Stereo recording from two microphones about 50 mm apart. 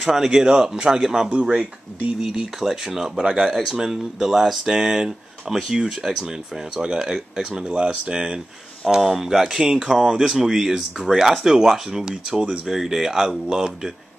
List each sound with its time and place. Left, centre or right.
0.0 s speech: centre
2.2 s speech: centre
3.3 s speech: centre
3.6 s speech: centre
9.0 s speech: centre
12.6 s speech: centre